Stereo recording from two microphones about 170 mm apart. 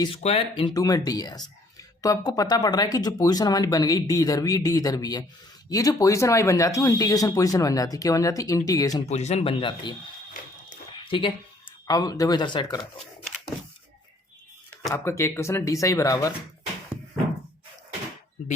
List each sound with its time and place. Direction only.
0.2 s speech: 35° left (ahead or behind)
9.0 s speech: 40° left (ahead or behind)
11.0 s a sound: 30° left (ahead or behind)
11.9 s speech: 20° left (ahead or behind)
14.9 s speech: 15° left (ahead or behind)